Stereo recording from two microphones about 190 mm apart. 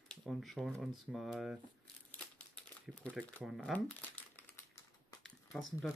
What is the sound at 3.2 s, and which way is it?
Speech, centre (ahead or behind).